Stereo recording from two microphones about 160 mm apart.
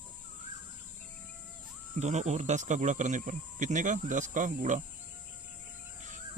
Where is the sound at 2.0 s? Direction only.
45° right (ahead or behind).